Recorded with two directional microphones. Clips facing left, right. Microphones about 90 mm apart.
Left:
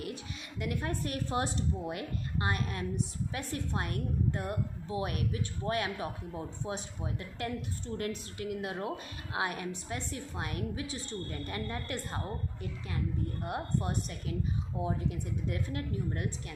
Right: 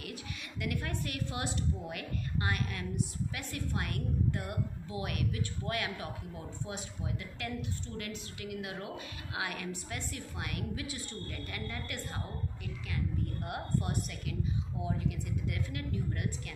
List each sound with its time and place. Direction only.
0.0 s a woman's voice: 30° left (ahead or behind)
8.4 s a woman's voice: 35° left (ahead or behind)
13.5 s a woman's voice: 25° left (ahead or behind)